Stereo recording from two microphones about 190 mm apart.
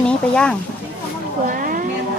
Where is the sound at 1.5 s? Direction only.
45° right (ahead or behind).